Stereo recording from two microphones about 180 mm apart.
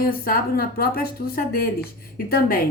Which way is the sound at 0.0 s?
55° left (ahead or behind).